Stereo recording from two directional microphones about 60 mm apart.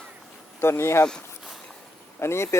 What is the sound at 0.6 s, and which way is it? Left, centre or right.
Speech, left.